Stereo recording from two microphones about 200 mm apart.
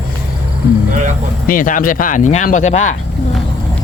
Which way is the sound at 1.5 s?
45° left (ahead or behind).